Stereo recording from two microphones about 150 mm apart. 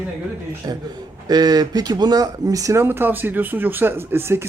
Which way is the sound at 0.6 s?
25° right (ahead or behind).